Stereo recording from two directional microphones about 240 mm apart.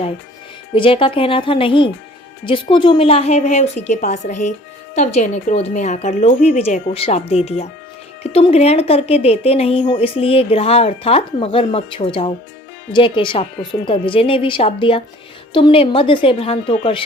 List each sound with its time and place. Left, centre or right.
0.7 s speech: left